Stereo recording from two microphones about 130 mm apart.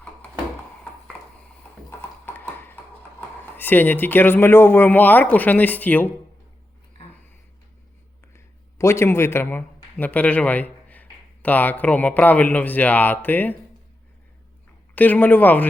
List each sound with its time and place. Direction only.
2.0 s a sound: 15° left (ahead or behind)
3.2 s a man's voice: 15° left (ahead or behind)
8.8 s a man's voice: 20° left (ahead or behind)
14.9 s a man's voice: 10° left (ahead or behind)